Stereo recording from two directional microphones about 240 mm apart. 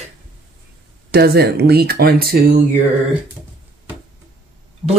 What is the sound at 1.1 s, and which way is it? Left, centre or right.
Speech, right.